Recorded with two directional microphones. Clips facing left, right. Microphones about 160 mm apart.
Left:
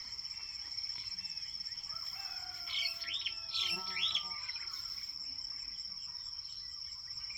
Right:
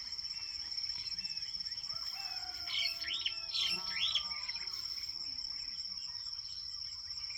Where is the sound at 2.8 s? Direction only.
25° left (ahead or behind).